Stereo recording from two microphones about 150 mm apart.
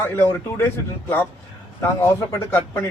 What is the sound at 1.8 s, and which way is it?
A man's voice, 15° left (ahead or behind).